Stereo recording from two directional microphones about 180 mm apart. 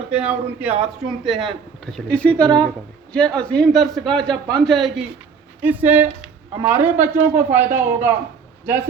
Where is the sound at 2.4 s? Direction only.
25° right (ahead or behind).